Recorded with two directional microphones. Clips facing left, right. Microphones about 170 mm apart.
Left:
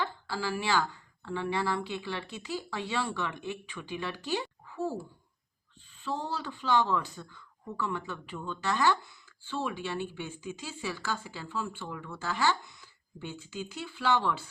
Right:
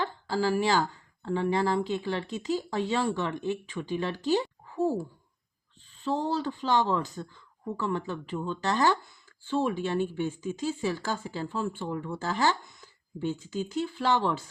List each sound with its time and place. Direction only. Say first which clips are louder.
0.3 s speech: right 7 dB; 40° right (ahead or behind)
6.0 s speech: right 6 dB; 40° right (ahead or behind)